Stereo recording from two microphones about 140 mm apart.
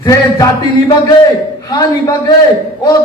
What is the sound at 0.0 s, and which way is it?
Speech, 30° left (ahead or behind).